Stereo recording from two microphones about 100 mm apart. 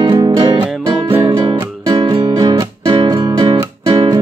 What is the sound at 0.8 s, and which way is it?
Music, 30° right (ahead or behind).